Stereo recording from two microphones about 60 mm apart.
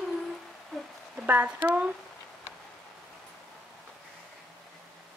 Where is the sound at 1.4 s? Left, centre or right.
Right.